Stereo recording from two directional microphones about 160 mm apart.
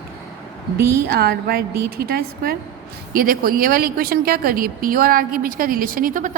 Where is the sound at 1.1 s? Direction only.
80° right.